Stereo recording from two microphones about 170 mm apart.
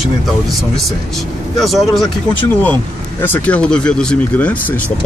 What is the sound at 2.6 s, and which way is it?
Speech, 10° left (ahead or behind).